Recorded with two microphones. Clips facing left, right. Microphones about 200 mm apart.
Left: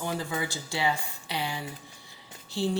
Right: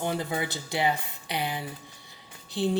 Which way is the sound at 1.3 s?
55° right (ahead or behind).